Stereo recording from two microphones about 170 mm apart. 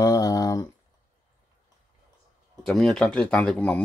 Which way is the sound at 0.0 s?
20° left (ahead or behind).